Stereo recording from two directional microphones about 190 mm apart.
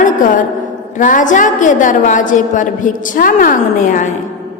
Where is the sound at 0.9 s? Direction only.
40° left (ahead or behind).